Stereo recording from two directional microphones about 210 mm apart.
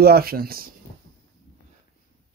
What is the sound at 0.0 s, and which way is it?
Speech, 45° right (ahead or behind).